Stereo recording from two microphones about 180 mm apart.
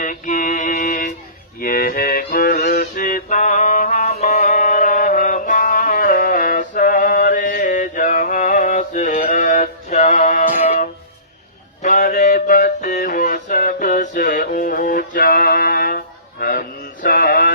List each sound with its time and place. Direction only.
0.0 s mantra: 50° left (ahead or behind)
1.5 s music: 55° left (ahead or behind)
11.8 s a sound: 50° left (ahead or behind)